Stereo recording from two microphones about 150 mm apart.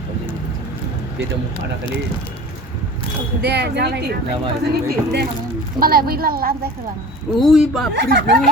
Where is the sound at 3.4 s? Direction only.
90° right.